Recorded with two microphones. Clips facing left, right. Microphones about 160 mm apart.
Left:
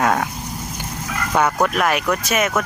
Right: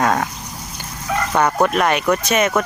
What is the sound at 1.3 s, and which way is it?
Speech, 5° left (ahead or behind).